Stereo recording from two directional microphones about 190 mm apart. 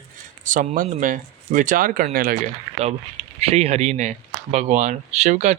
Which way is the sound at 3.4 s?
30° right (ahead or behind).